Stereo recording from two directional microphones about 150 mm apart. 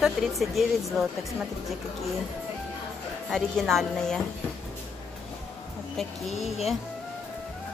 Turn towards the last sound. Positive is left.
turn(degrees=45)  # may be behind; listen again after turning